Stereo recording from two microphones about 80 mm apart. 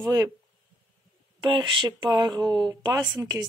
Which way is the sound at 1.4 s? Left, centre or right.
Right.